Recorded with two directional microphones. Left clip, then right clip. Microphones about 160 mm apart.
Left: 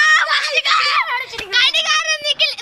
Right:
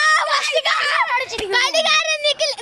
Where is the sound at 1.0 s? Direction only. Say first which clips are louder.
Right 2 dB; 40° right (ahead or behind).